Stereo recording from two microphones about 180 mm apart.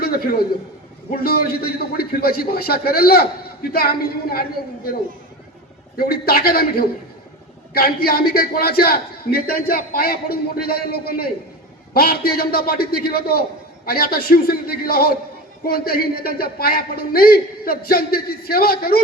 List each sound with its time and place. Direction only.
0.0 s a sound: 55° left (ahead or behind)
1.1 s a man's voice: 55° left (ahead or behind)
6.0 s a man's voice: 55° left (ahead or behind)